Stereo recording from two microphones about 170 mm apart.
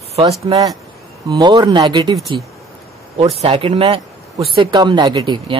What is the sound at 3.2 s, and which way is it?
Speech, 35° right (ahead or behind).